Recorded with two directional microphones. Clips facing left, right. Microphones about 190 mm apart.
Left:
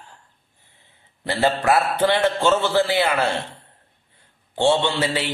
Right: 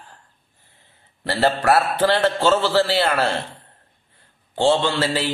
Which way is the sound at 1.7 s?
15° left (ahead or behind).